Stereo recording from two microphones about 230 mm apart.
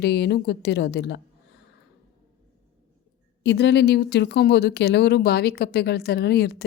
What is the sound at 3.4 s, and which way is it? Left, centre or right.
A woman's voice, left.